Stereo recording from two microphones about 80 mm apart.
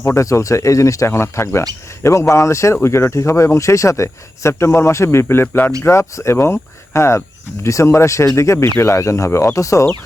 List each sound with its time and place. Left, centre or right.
0.0 s speech: left